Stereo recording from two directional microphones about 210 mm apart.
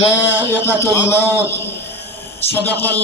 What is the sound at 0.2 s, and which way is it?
Speech, 10° left (ahead or behind).